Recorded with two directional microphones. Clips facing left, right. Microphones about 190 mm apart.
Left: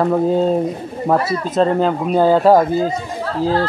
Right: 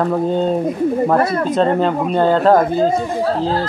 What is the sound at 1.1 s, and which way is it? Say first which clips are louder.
Speech: right 2 dB; 55° right (ahead or behind).